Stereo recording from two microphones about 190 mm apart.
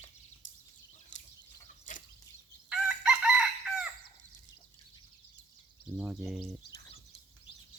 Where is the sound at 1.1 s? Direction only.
40° left (ahead or behind).